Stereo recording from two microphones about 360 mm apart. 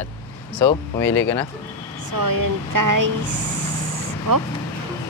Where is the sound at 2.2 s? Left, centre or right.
Right.